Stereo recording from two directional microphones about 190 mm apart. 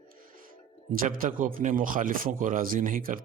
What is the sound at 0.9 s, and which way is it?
A man's voice, 45° right (ahead or behind).